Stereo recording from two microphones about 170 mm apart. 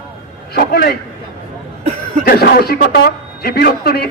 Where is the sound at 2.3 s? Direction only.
65° left (ahead or behind).